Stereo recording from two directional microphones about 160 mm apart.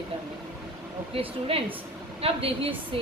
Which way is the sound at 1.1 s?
35° right (ahead or behind).